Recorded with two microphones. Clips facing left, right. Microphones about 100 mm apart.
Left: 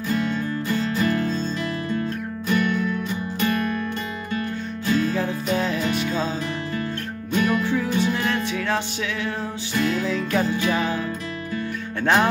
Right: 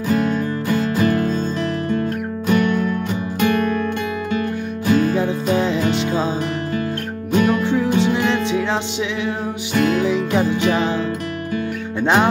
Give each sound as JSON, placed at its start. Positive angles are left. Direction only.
{"t": 0.1, "sound": "music", "side_deg": -50}
{"t": 2.4, "sound": "music", "side_deg": -45}
{"t": 3.3, "sound": "music", "side_deg": -60}
{"t": 4.8, "sound": "music", "side_deg": -55}
{"t": 5.1, "sound": "music", "side_deg": -20}
{"t": 7.3, "sound": "music", "side_deg": -25}
{"t": 9.8, "sound": "music", "side_deg": -60}
{"t": 10.0, "sound": "music", "side_deg": -20}
{"t": 12.0, "sound": "music", "side_deg": -20}